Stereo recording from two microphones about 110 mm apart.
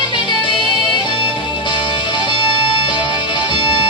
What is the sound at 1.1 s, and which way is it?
Music, 45° left (ahead or behind).